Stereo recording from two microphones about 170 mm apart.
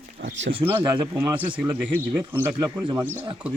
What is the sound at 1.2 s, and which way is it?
Speech, 10° right (ahead or behind).